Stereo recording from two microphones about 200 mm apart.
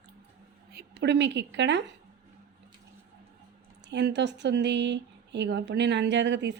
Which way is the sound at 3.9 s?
60° right (ahead or behind).